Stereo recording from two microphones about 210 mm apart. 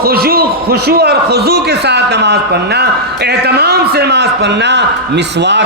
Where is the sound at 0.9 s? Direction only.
50° right (ahead or behind).